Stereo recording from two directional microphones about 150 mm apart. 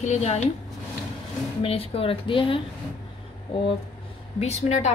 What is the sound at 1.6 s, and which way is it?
Speech, 40° left (ahead or behind).